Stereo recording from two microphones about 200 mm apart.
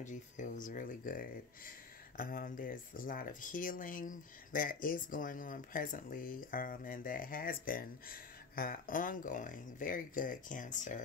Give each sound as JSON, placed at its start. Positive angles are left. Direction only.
{"t": 0.0, "sound": "speech", "side_deg": 40}